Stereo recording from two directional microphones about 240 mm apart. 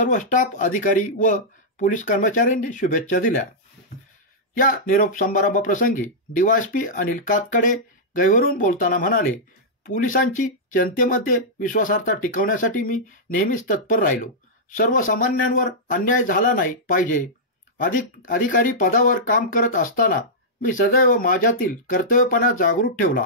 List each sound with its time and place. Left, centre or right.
0.0 s speech: left
4.6 s speech: left